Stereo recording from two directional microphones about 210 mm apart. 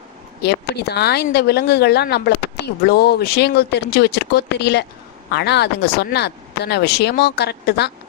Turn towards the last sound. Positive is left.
turn(degrees=55)  # may be behind; listen again after turning